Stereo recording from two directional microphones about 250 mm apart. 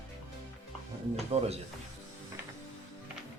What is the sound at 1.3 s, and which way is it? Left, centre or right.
Speech, right.